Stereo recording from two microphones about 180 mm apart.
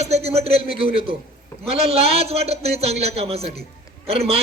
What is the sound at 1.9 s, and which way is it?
A man's voice, 35° right (ahead or behind).